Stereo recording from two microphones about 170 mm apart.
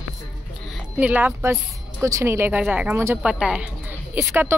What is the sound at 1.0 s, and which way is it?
A woman's voice, 10° right (ahead or behind).